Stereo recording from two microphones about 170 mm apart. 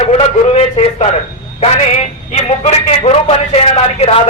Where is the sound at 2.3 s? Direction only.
40° left (ahead or behind).